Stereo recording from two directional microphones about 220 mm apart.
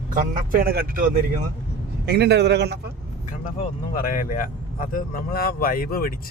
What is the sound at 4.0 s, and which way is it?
Speech, 40° left (ahead or behind).